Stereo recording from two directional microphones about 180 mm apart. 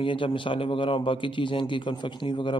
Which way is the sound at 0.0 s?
30° left (ahead or behind).